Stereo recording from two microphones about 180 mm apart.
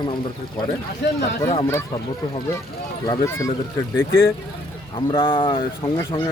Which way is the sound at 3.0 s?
20° left (ahead or behind).